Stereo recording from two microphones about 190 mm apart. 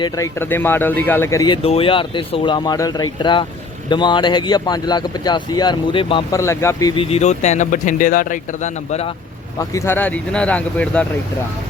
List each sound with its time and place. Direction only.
0.0 s speech: 15° left (ahead or behind)
1.6 s speech: 30° left (ahead or behind)
6.3 s speech: 15° left (ahead or behind); by 9.1 s 35° left (ahead or behind)
9.6 s speech: 15° left (ahead or behind)